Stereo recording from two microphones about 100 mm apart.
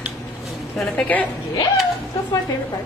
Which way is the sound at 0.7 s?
15° left (ahead or behind).